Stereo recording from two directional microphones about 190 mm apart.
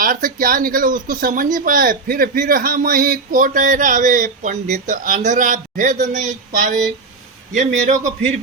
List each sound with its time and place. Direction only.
0.0 s a man's voice: 45° right (ahead or behind)